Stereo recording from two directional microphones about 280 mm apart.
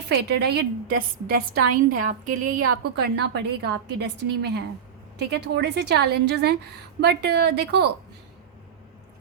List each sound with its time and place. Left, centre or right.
0.1 s a woman's voice: right